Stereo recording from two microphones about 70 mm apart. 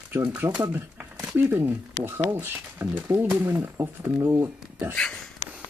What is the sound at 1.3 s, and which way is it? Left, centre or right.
Speech, right.